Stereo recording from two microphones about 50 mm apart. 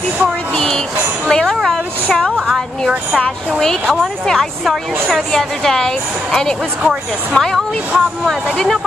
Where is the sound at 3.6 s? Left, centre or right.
Centre.